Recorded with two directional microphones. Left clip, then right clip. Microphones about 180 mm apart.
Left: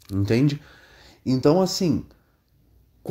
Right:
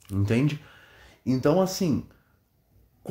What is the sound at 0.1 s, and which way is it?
Speech, 20° left (ahead or behind).